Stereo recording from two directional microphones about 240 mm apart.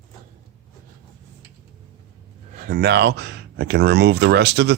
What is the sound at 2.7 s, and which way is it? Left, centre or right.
Speech, right.